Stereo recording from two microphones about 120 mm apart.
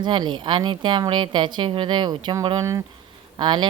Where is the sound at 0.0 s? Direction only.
40° right (ahead or behind).